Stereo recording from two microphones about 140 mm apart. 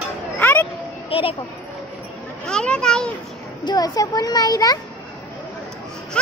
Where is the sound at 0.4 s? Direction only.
15° left (ahead or behind).